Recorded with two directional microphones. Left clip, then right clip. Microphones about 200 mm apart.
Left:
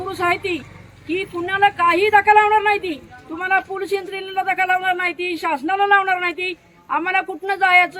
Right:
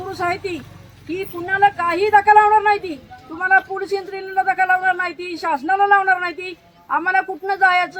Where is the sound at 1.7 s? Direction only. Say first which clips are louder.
Left 1 dB; 15° left (ahead or behind).